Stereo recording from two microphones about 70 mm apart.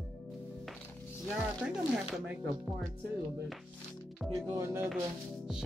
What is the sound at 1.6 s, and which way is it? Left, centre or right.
Music, centre.